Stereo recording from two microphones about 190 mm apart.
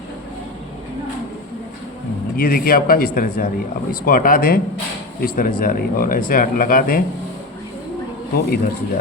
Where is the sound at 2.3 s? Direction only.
50° left (ahead or behind).